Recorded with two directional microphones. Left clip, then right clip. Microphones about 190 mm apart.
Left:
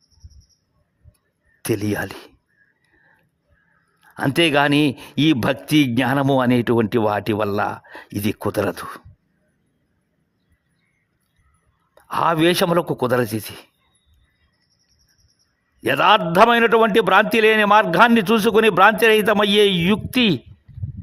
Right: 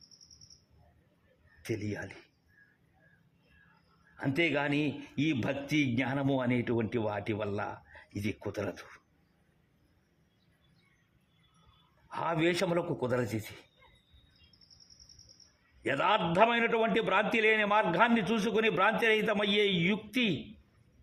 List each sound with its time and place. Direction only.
1.6 s a man's voice: 50° left (ahead or behind)
4.2 s a man's voice: 50° left (ahead or behind)
12.0 s a man's voice: 45° left (ahead or behind)
15.8 s a man's voice: 40° left (ahead or behind)